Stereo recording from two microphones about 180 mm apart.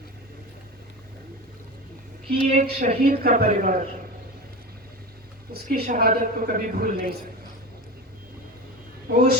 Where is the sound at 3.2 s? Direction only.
55° right (ahead or behind).